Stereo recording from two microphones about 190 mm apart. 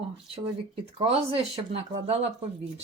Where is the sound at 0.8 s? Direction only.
30° right (ahead or behind).